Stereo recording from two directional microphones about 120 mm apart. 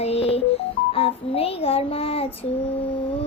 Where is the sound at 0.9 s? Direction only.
55° left (ahead or behind).